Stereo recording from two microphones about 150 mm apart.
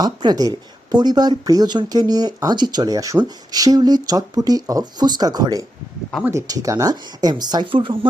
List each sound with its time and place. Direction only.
0.0 s speech: 30° right (ahead or behind)